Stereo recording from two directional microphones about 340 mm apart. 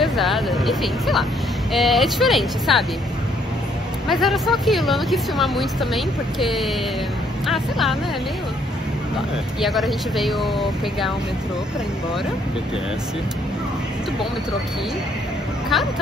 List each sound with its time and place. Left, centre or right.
0.0 s speech: centre
4.1 s speech: centre
9.6 s speech: centre
15.7 s speech: centre